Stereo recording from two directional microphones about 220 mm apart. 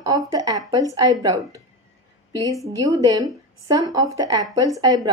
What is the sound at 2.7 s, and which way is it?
A woman's voice, 15° right (ahead or behind).